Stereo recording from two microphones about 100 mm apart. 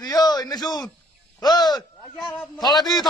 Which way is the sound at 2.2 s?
Centre (ahead or behind).